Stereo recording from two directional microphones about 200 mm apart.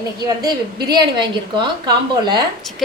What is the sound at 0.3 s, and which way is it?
A woman's voice, 20° right (ahead or behind).